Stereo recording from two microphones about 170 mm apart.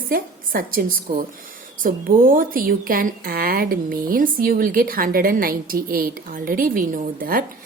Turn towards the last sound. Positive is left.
turn(degrees=-55)  # may be behind; listen again after turning